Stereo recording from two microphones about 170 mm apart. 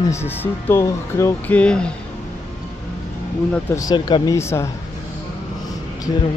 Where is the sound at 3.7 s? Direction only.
20° left (ahead or behind).